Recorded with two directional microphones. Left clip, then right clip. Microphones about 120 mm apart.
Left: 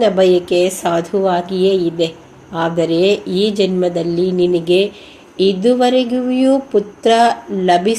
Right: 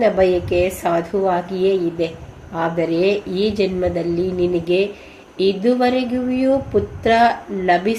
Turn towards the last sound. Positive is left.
turn(degrees=25)  # may be behind; listen again after turning